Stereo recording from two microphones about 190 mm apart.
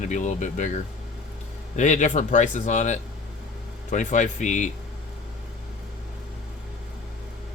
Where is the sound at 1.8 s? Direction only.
40° left (ahead or behind).